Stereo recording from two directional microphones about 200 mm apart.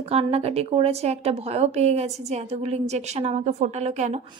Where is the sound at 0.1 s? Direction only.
30° right (ahead or behind).